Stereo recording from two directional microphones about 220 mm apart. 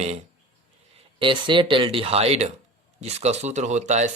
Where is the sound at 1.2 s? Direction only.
20° right (ahead or behind).